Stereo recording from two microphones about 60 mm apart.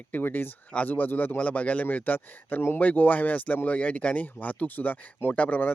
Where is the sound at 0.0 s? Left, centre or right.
Left.